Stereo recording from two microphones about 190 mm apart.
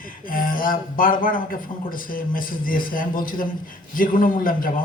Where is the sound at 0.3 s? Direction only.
45° left (ahead or behind).